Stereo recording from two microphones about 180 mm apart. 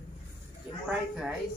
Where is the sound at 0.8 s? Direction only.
5° right (ahead or behind).